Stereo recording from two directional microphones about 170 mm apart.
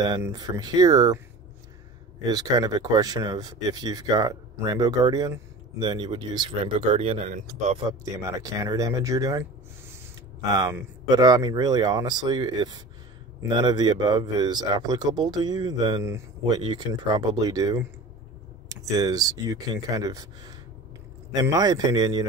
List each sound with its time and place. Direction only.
0.0 s speech: 25° right (ahead or behind)
2.2 s speech: 25° right (ahead or behind); by 7.8 s 45° right (ahead or behind)
8.0 s speech: 20° right (ahead or behind)
10.5 s speech: 15° right (ahead or behind)